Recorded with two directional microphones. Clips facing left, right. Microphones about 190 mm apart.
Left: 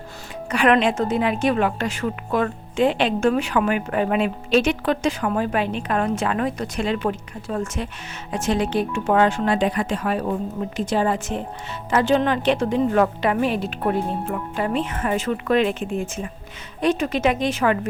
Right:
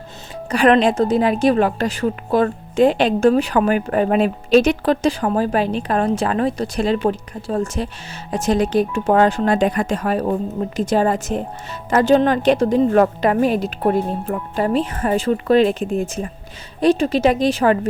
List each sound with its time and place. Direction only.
0.5 s a woman's voice: 35° right (ahead or behind)